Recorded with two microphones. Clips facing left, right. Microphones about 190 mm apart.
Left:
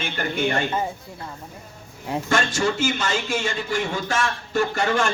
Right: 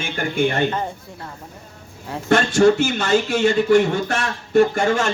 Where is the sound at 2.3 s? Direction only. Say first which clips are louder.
Right 9 dB; 65° right (ahead or behind).